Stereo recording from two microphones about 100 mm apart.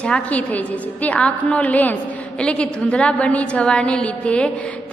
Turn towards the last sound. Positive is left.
turn(degrees=15)  # may be behind; listen again after turning